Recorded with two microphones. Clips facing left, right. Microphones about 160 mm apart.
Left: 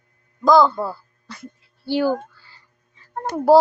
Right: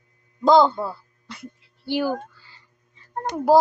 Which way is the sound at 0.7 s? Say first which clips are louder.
Left 2 dB; 5° left (ahead or behind).